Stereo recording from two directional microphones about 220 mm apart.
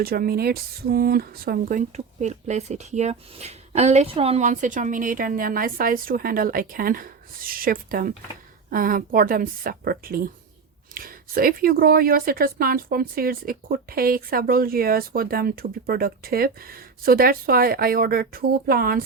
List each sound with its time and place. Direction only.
0.0 s speech: 45° right (ahead or behind)
2.2 s speech: 30° right (ahead or behind)